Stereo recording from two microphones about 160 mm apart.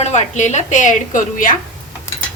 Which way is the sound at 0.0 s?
45° left (ahead or behind).